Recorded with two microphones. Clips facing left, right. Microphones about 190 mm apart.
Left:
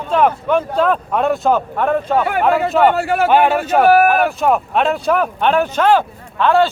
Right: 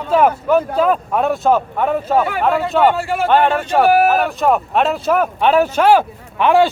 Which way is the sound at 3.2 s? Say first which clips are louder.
Even; 10° left (ahead or behind).